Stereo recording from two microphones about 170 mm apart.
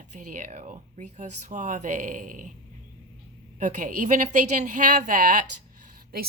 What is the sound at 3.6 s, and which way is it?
Speech, 50° right (ahead or behind).